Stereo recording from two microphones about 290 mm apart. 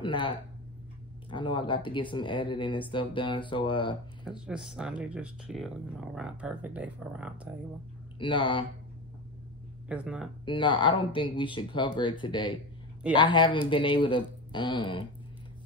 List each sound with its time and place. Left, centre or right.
0.0 s speech: centre
1.3 s speech: centre
4.2 s speech: centre
8.2 s speech: centre
9.8 s speech: centre
10.4 s speech: centre